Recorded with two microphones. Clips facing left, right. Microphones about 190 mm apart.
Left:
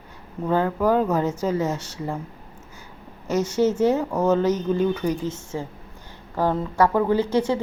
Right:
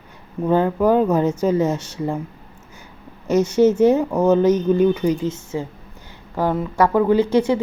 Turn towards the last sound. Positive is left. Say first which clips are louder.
# right 5 dB
turn(degrees=-15)  # may be behind; listen again after turning